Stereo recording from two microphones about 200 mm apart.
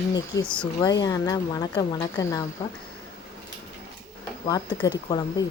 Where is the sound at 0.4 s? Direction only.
5° left (ahead or behind).